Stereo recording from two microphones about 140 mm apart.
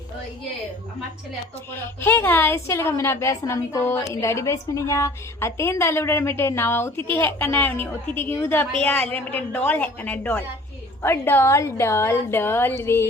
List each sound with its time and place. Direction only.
1.7 s a woman's voice: 15° left (ahead or behind)